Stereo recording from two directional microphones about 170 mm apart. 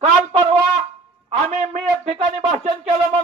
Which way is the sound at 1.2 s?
40° right (ahead or behind).